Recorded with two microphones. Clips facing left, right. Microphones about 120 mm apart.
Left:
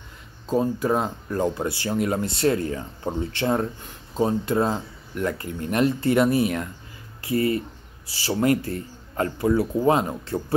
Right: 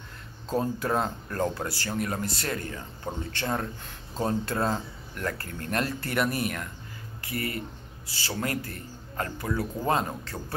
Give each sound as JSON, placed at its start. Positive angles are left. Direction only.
{"t": 0.5, "sound": "speech", "side_deg": 10}